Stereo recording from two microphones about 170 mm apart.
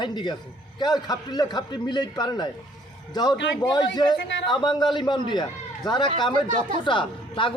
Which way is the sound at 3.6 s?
25° left (ahead or behind).